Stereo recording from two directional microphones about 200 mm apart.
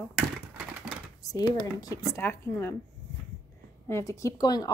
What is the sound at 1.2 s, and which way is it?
Speech, 20° left (ahead or behind).